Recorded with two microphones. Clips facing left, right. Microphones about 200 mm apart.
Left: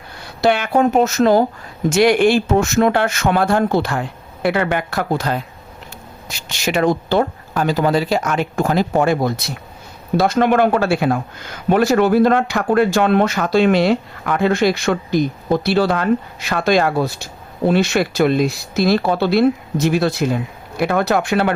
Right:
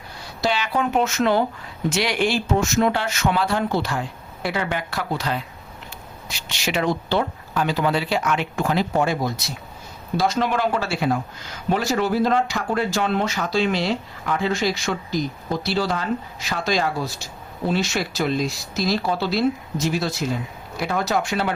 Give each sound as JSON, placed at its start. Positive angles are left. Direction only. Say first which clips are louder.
{"t": 0.4, "sound": "speech", "louder": "left 8 dB", "side_deg": 55}
{"t": 1.9, "sound": "speech", "louder": "left 9 dB", "side_deg": 50}